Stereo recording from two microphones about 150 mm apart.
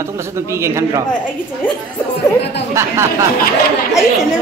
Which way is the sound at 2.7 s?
20° right (ahead or behind).